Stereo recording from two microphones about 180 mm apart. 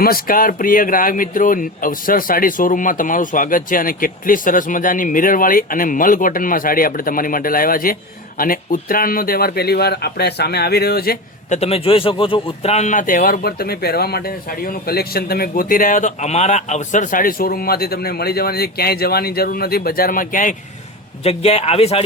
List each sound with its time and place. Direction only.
0.0 s speech: 55° left (ahead or behind)
11.4 s speech: 40° left (ahead or behind)
21.2 s speech: 35° left (ahead or behind)